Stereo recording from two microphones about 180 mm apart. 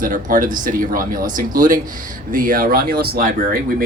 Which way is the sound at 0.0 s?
50° right (ahead or behind).